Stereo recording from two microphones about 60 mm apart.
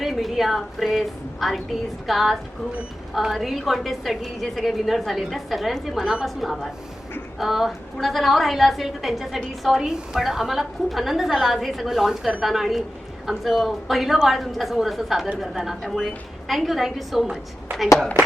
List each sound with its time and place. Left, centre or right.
0.0 s a woman's voice: centre
17.7 s speech: right